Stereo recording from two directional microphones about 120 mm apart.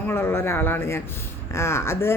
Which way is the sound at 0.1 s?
20° left (ahead or behind).